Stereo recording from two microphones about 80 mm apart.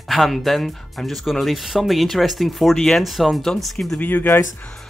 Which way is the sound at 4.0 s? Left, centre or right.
Left.